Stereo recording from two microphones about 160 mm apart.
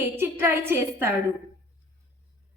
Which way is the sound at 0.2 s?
15° right (ahead or behind).